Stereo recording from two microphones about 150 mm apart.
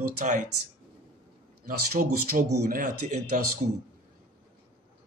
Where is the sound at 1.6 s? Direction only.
85° right; by 3.4 s 65° right (ahead or behind).